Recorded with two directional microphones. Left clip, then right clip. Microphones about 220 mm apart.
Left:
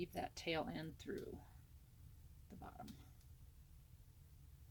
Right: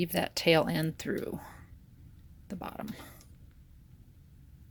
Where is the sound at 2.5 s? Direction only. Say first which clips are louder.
Right 18 dB; 40° right (ahead or behind).